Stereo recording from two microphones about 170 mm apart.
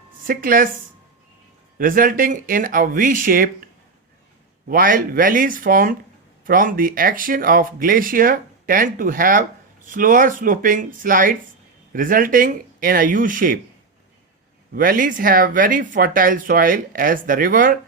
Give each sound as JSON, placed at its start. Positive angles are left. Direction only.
{"t": 0.3, "sound": "speech", "side_deg": -55}
{"t": 1.8, "sound": "speech", "side_deg": -55}
{"t": 4.7, "sound": "speech", "side_deg": -55}
{"t": 14.8, "sound": "speech", "side_deg": -55}